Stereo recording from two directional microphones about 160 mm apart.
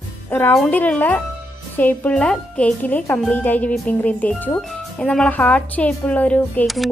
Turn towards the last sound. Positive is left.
turn(degrees=0)  # may be behind; listen again after turning